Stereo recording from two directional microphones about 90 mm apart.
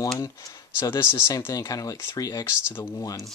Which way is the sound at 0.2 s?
40° left (ahead or behind).